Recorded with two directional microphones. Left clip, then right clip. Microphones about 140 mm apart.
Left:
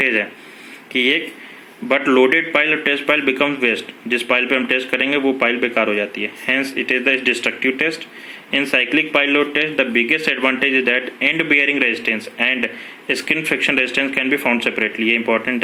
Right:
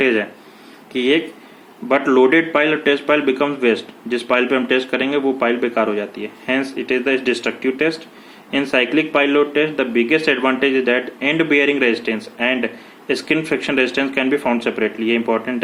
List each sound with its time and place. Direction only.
0.0 s a man's voice: 10° left (ahead or behind)
1.9 s a man's voice: 20° left (ahead or behind)